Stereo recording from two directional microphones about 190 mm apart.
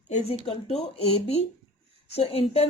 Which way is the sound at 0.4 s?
30° left (ahead or behind).